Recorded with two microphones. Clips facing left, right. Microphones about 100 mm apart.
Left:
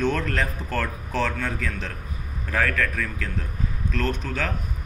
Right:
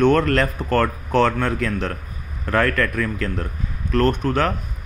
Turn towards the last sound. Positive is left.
turn(degrees=-60)  # may be behind; listen again after turning